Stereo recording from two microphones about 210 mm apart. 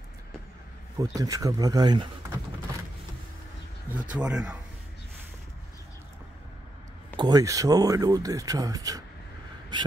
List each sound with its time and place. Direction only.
0.9 s speech: 15° right (ahead or behind)
4.1 s speech: 5° right (ahead or behind)
7.2 s speech: 20° right (ahead or behind)
9.7 s a sound: 20° right (ahead or behind)